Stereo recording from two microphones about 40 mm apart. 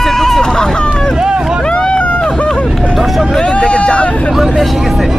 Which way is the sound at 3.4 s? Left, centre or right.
Left.